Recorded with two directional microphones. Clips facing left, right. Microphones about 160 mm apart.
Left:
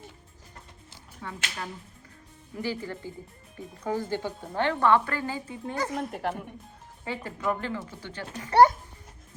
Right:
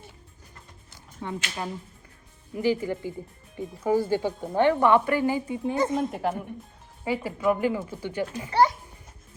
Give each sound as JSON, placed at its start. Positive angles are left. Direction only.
{"t": 1.2, "sound": "speech", "side_deg": -20}
{"t": 6.1, "sound": "speech", "side_deg": 0}
{"t": 8.4, "sound": "a child's voice", "side_deg": 50}